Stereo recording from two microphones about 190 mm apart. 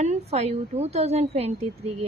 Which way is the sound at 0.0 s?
35° right (ahead or behind).